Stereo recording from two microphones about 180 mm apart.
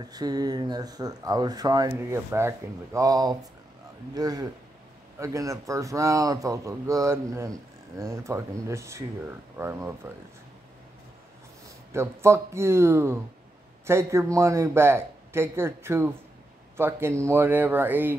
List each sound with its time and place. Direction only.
0.0 s speech: 20° right (ahead or behind)
11.9 s speech: 15° right (ahead or behind)